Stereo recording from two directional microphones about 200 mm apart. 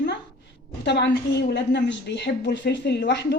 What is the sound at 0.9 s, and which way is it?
A woman's voice, 60° left (ahead or behind).